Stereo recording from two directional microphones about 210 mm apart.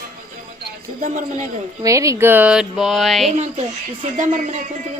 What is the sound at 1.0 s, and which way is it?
Speech, 40° right (ahead or behind).